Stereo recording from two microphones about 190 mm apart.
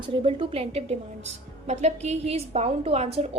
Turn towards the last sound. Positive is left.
turn(degrees=-30)  # may be behind; listen again after turning